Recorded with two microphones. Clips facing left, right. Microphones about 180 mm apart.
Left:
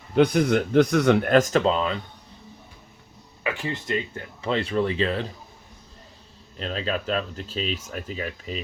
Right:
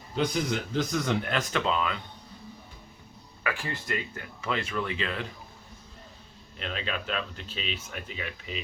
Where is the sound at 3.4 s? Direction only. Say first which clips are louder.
Left 4 dB; 20° left (ahead or behind).